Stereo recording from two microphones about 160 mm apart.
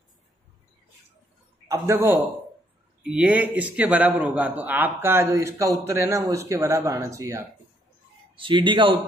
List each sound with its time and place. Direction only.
1.7 s a man's voice: 15° right (ahead or behind)
8.4 s a man's voice: 30° right (ahead or behind)